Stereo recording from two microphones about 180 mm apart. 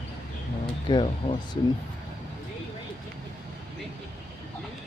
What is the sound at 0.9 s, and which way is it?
Speech, 25° left (ahead or behind).